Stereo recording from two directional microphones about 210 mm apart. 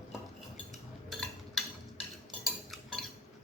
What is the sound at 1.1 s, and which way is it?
Cutlery, centre (ahead or behind).